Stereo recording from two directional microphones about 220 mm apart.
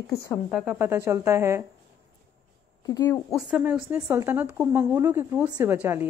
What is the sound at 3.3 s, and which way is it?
A woman's voice, 5° right (ahead or behind).